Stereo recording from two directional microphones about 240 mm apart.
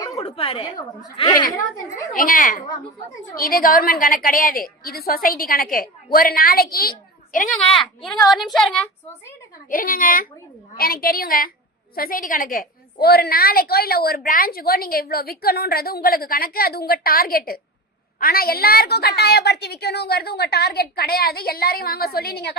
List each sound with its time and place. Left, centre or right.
0.0 s a woman's voice: left
2.1 s a woman's voice: left
7.5 s a woman's voice: centre
9.6 s a woman's voice: left